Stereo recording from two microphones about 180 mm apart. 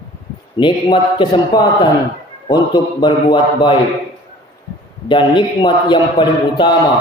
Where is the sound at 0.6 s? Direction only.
25° left (ahead or behind).